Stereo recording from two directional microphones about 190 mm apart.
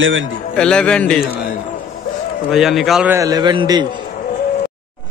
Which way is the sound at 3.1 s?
20° right (ahead or behind).